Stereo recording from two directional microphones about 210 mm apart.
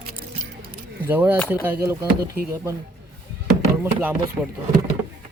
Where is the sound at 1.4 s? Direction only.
10° left (ahead or behind).